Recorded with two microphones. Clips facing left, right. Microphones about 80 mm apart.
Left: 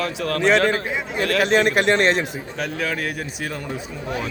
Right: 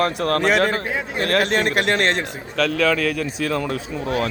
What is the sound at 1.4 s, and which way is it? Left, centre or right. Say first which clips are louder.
Speech: left 6 dB; centre.